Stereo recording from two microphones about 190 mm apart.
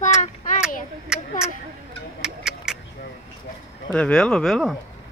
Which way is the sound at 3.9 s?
5° left (ahead or behind).